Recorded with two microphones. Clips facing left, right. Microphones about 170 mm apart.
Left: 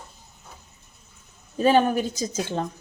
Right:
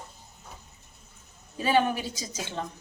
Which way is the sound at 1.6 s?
45° left (ahead or behind).